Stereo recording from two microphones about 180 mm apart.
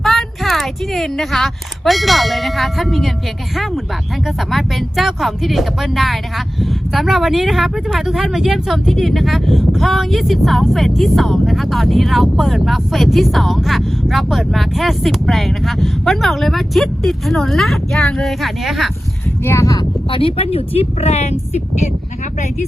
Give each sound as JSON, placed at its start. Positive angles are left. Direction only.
{"t": 0.0, "sound": "speech", "side_deg": 0}
{"t": 4.4, "sound": "speech", "side_deg": 0}
{"t": 19.5, "sound": "speech", "side_deg": 15}